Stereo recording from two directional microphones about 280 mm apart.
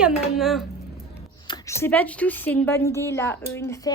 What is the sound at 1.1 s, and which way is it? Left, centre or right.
Speech, centre.